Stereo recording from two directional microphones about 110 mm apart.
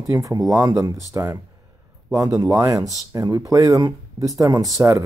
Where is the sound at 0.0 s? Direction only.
30° right (ahead or behind).